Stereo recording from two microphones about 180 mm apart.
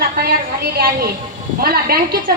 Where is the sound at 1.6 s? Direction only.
60° right (ahead or behind).